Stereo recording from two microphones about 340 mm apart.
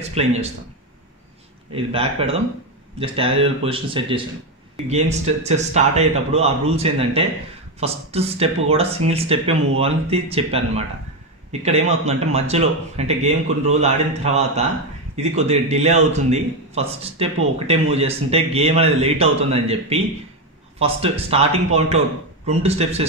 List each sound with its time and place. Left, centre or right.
0.1 s speech: centre
1.7 s speech: centre